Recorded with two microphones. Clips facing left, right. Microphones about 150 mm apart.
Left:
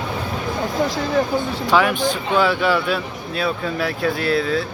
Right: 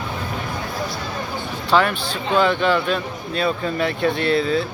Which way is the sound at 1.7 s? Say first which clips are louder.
Left 1 dB; 10° left (ahead or behind).